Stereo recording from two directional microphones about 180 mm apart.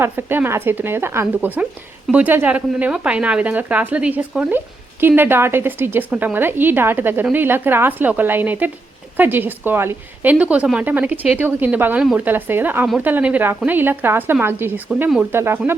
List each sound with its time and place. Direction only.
0.0 s a woman's voice: 10° right (ahead or behind)